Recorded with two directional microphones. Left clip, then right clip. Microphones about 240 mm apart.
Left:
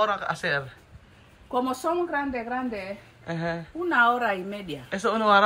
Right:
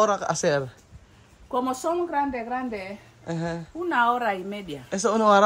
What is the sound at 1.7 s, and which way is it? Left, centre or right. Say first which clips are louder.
A woman's voice: right 1 dB; centre.